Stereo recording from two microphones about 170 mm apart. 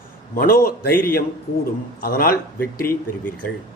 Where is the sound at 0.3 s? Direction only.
60° left (ahead or behind).